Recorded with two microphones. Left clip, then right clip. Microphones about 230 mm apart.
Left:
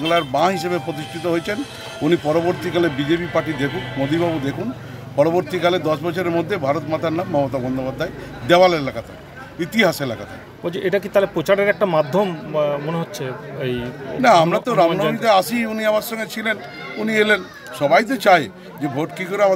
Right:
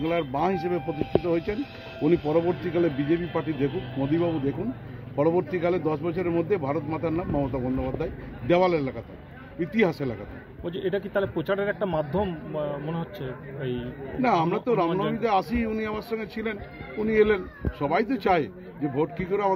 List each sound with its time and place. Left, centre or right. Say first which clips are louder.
0.1 s speech: left 10 dB; centre
10.6 s speech: left 8 dB; left
14.2 s speech: left 10 dB; centre
14.9 s speech: left 8 dB; left
15.1 s speech: left 9 dB; centre